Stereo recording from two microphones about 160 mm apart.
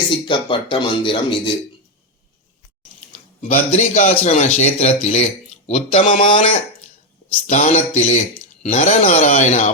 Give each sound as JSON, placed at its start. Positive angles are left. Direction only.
{"t": 0.1, "sound": "speech", "side_deg": 30}
{"t": 3.7, "sound": "speech", "side_deg": 50}
{"t": 4.1, "sound": "speech", "side_deg": 35}
{"t": 7.4, "sound": "speech", "side_deg": 50}